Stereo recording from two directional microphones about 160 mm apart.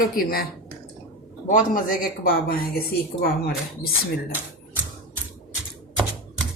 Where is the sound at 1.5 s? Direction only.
60° left (ahead or behind).